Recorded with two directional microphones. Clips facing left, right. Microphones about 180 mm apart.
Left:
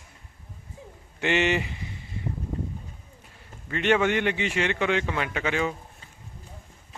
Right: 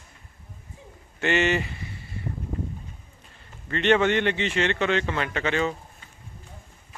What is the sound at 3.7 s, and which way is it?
A man's voice, 10° left (ahead or behind).